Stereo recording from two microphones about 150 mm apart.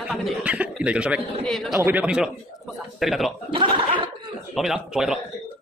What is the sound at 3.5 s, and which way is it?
Gargling, 35° right (ahead or behind).